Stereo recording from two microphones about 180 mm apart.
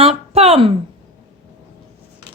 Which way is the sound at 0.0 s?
35° right (ahead or behind).